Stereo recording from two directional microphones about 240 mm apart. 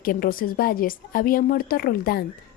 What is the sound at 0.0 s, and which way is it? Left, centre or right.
Speech, left.